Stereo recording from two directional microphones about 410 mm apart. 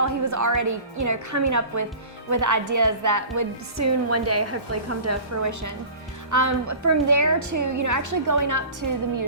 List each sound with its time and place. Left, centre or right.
0.0 s a woman's voice: right